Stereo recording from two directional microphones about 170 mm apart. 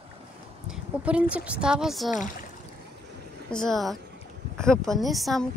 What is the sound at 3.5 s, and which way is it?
A woman's voice, centre (ahead or behind).